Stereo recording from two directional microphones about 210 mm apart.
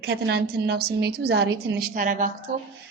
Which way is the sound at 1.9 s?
40° right (ahead or behind).